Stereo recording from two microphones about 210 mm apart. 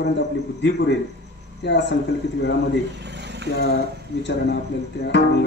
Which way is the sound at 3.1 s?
55° right (ahead or behind).